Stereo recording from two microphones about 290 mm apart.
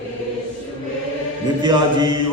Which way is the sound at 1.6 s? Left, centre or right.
Centre.